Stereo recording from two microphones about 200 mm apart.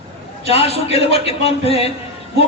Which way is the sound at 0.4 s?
30° left (ahead or behind).